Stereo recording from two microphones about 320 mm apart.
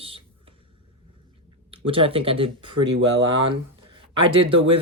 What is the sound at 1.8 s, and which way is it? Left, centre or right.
Speech, centre.